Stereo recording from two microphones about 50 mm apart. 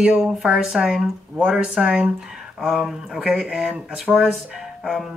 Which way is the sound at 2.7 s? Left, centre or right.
Centre.